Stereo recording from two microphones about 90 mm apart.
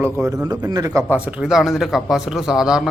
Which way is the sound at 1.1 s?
15° right (ahead or behind).